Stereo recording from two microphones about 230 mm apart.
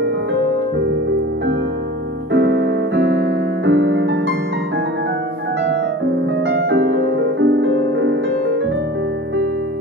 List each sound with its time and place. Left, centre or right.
2.3 s keyboard: right
6.4 s music: right